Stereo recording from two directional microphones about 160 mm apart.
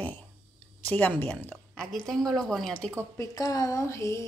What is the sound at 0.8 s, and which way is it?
Speech, 10° left (ahead or behind).